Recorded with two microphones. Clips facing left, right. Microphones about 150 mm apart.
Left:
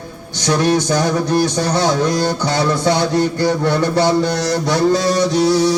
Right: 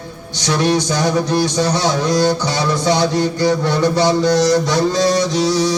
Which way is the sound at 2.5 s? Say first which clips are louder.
Left 1 dB; 55° left (ahead or behind).